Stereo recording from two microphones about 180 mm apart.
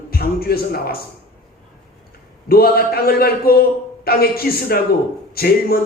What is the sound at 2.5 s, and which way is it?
A man's voice, 55° left (ahead or behind).